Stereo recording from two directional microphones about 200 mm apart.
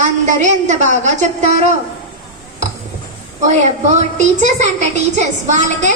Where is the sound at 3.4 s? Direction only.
35° right (ahead or behind).